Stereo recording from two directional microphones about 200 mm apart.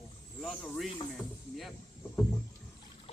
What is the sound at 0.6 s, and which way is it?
Speech, centre (ahead or behind).